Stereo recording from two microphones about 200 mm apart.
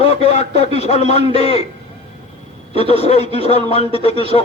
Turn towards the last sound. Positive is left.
turn(degrees=30)  # may be behind; listen again after turning